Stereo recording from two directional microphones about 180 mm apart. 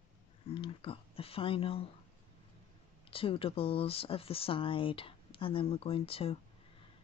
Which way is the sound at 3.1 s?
30° left (ahead or behind).